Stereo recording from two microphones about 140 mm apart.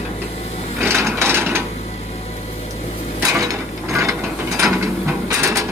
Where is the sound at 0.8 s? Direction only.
15° right (ahead or behind).